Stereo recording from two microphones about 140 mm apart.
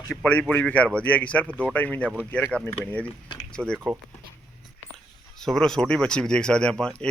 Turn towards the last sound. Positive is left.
turn(degrees=5)  # may be behind; listen again after turning